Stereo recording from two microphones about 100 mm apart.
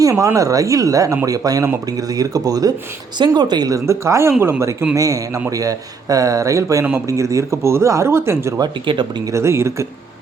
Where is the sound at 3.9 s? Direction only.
30° right (ahead or behind).